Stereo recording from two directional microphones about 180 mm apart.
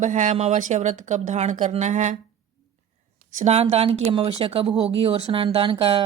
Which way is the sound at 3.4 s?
35° right (ahead or behind).